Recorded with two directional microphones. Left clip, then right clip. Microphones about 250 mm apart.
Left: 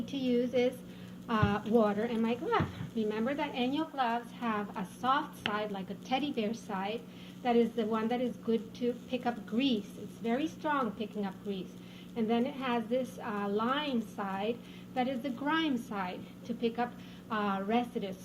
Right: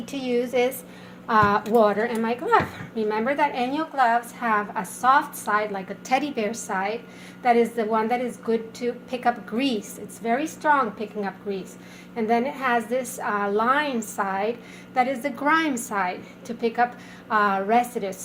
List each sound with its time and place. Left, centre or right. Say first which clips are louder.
0.0 s a woman's voice: right 7 dB; right